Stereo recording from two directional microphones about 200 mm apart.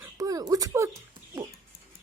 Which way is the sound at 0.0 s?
20° right (ahead or behind).